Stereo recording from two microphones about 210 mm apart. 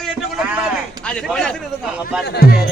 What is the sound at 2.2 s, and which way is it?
Speech, 50° left (ahead or behind).